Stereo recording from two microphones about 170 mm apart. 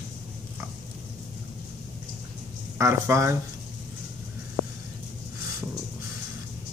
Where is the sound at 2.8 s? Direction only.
15° right (ahead or behind).